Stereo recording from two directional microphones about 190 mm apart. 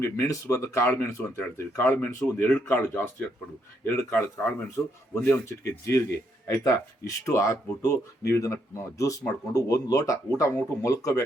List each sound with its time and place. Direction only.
0.0 s speech: 15° left (ahead or behind)